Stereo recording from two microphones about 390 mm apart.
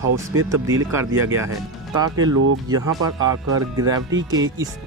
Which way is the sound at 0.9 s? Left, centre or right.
Centre.